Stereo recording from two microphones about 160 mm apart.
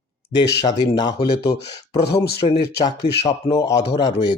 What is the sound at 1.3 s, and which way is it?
Speech, 90° left.